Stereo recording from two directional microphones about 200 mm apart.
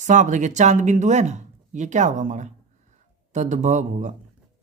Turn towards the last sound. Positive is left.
turn(degrees=-35)  # may be behind; listen again after turning